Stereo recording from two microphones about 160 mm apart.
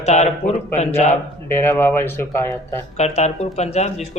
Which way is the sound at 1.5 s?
15° left (ahead or behind).